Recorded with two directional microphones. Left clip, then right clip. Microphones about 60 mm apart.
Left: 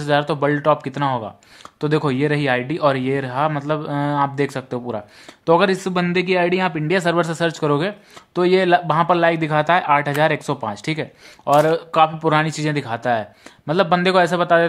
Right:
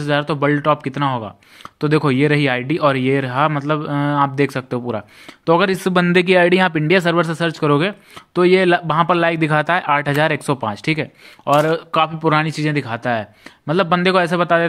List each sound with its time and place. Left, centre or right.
0.0 s speech: centre
1.8 s speech: right
2.1 s a man's voice: right
5.4 s speech: right
5.7 s speech: right
7.2 s speech: centre
7.6 s a man's voice: right
11.5 s speech: centre
11.9 s speech: right